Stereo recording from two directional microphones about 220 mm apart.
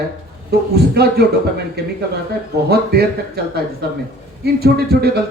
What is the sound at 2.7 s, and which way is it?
Speech, 45° right (ahead or behind).